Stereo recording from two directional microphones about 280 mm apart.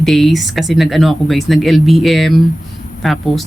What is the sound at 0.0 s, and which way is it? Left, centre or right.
Speech, centre.